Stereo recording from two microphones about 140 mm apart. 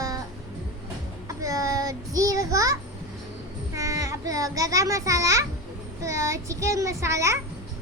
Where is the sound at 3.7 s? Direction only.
25° right (ahead or behind).